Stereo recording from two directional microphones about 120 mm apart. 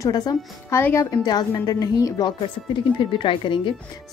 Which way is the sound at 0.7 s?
20° left (ahead or behind).